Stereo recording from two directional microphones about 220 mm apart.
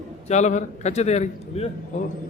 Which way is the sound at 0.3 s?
30° left (ahead or behind).